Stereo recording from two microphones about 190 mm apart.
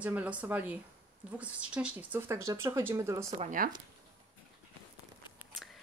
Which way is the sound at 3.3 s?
45° right (ahead or behind).